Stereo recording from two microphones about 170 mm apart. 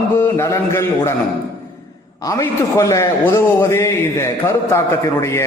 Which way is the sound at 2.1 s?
20° left (ahead or behind).